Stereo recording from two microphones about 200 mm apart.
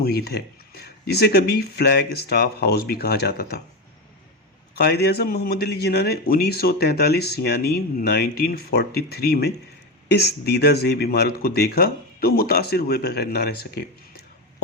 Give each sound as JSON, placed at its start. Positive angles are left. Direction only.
{"t": 0.0, "sound": "speech", "side_deg": 50}
{"t": 4.8, "sound": "speech", "side_deg": 55}